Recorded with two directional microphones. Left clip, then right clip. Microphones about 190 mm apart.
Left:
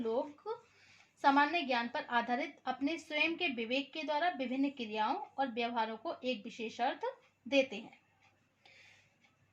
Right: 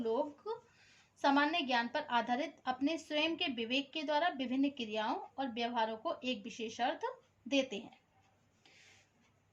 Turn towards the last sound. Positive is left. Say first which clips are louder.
# left 3 dB
turn(degrees=20)  # may be behind; listen again after turning